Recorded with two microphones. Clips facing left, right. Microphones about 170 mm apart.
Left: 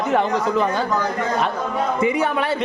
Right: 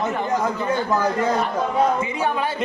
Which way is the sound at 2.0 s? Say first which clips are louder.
Left 4 dB; 75° left (ahead or behind).